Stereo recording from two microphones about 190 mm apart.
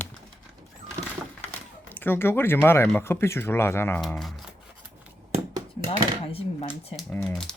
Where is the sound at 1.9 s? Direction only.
10° left (ahead or behind).